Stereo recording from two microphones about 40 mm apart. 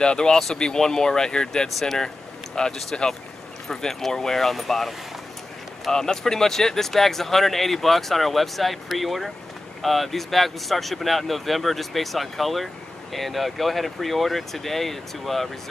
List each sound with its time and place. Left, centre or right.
0.0 s speech: centre
0.4 s speech: centre
1.7 s speech: centre
2.5 s speech: centre
5.9 s speech: centre